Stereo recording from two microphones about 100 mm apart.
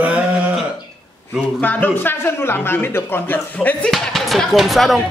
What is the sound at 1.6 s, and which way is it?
Speech, 20° left (ahead or behind).